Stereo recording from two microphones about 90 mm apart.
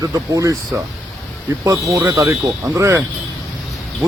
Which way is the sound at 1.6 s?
35° right (ahead or behind).